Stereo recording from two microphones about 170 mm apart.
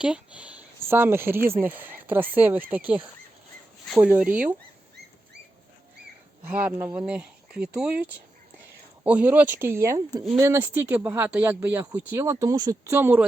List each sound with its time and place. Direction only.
0.0 s speech: 5° right (ahead or behind)
6.5 s speech: 10° right (ahead or behind)